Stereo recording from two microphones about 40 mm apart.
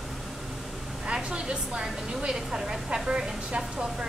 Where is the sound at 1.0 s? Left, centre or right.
Right.